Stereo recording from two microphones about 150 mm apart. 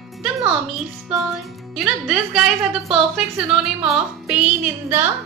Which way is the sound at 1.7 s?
Centre (ahead or behind).